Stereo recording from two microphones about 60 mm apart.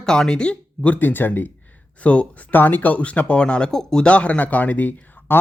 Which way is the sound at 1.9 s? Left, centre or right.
Left.